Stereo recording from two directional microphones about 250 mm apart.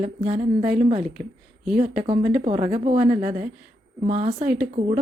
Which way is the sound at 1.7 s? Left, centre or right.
Centre.